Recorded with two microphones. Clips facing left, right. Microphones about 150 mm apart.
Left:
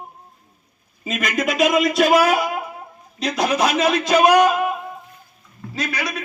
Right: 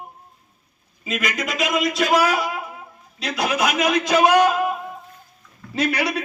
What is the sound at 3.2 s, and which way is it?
Speech, 35° left (ahead or behind).